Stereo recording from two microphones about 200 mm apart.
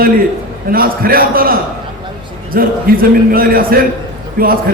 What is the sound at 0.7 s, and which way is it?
A man's voice, 45° right (ahead or behind).